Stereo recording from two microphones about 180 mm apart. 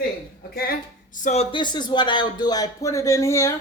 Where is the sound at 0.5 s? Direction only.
50° left (ahead or behind); by 3.5 s 15° left (ahead or behind).